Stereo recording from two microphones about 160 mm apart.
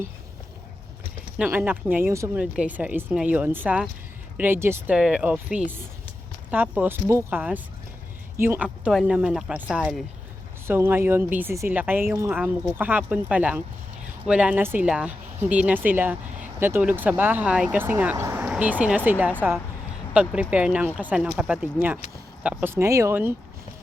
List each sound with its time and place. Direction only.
1.4 s a woman's voice: 10° right (ahead or behind)